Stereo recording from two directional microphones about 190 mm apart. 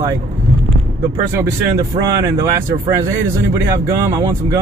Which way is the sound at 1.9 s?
15° right (ahead or behind).